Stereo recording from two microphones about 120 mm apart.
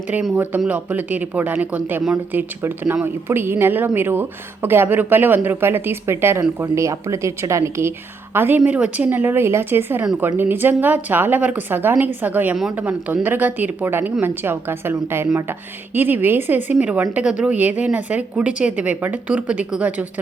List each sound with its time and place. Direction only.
0.1 s a woman's voice: 10° right (ahead or behind)